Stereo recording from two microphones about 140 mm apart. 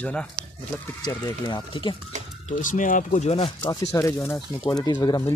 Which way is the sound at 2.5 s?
65° left (ahead or behind).